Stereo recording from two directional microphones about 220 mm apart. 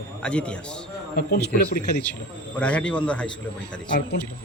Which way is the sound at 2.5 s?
5° left (ahead or behind).